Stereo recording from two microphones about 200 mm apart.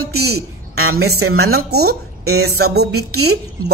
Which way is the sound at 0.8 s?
90° right.